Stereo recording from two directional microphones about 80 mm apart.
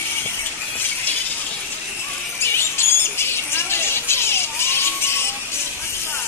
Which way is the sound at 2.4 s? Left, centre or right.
Left.